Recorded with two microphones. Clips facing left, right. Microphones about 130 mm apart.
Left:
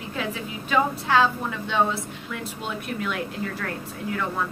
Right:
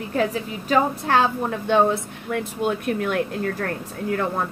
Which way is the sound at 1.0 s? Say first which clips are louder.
Right 1 dB; 50° right (ahead or behind).